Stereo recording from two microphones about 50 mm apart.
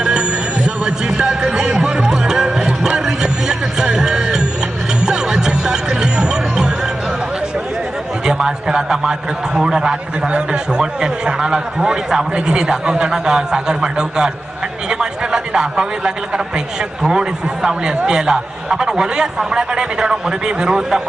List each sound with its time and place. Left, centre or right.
0.7 s music: centre
8.3 s a man's voice: centre
14.9 s a sound: centre
17.0 s a man's voice: centre